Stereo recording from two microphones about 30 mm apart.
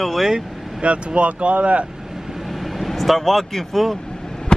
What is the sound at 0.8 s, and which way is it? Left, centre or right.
Speech, right.